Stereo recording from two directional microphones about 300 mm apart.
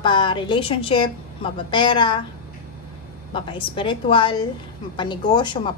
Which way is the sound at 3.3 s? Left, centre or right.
Centre.